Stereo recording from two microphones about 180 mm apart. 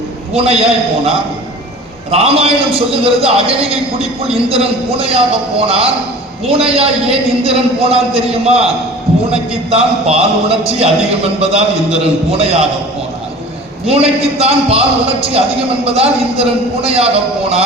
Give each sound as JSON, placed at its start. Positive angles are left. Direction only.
{"t": 0.3, "sound": "a man's voice", "side_deg": -35}
{"t": 13.8, "sound": "a man's voice", "side_deg": -35}